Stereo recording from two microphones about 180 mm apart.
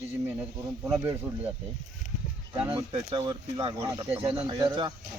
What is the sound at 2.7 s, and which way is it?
Speech, 25° right (ahead or behind).